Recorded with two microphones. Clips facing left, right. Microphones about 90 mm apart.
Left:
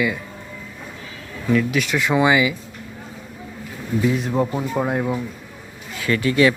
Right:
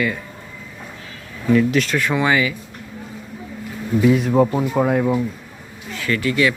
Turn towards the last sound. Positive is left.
turn(degrees=30)  # may be behind; listen again after turning